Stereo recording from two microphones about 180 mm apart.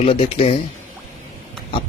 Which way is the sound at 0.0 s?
35° left (ahead or behind).